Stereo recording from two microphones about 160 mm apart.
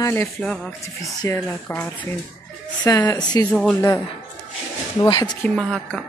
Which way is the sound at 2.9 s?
20° left (ahead or behind).